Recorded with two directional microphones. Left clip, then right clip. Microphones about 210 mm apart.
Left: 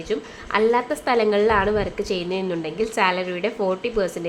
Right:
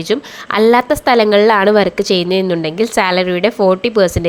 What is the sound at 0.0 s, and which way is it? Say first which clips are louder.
A woman's voice: right 9 dB; 40° right (ahead or behind).